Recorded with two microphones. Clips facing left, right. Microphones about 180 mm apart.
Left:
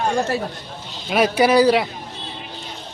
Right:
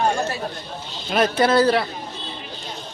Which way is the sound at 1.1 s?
10° left (ahead or behind).